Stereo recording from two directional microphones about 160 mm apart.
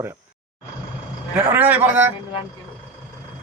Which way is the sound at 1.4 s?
15° right (ahead or behind).